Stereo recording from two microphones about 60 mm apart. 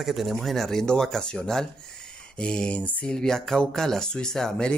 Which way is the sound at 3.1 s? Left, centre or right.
Centre.